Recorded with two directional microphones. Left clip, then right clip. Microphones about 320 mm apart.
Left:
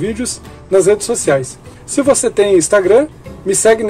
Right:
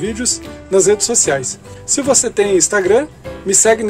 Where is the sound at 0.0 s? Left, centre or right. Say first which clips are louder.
Even; centre.